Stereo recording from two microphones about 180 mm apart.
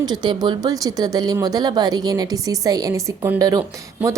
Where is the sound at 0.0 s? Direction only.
25° right (ahead or behind).